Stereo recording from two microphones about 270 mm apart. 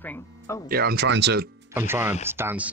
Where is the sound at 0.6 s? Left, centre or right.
Right.